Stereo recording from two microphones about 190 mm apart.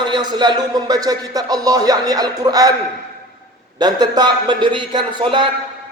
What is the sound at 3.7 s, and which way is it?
A man's voice, 20° right (ahead or behind).